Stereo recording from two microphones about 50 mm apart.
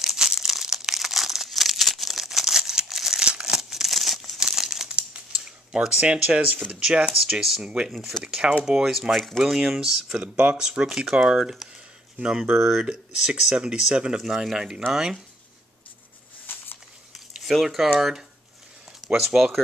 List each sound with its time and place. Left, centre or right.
0.0 s crumpling: centre
4.4 s crumpling: centre
5.8 s speech: right
8.2 s speech: centre
8.6 s speech: centre
10.2 s speech: right
17.5 s speech: centre